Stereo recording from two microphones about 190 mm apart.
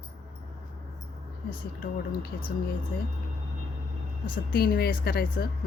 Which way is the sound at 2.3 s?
45° left (ahead or behind).